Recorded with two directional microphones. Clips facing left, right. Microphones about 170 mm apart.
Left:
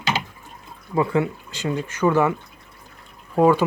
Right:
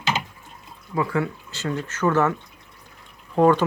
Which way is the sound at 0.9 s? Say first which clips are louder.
Left 3 dB; 25° left (ahead or behind).